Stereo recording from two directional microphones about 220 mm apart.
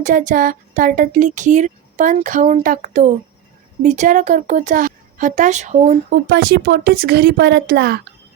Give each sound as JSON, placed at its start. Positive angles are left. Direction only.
{"t": 0.0, "sound": "speech", "side_deg": -35}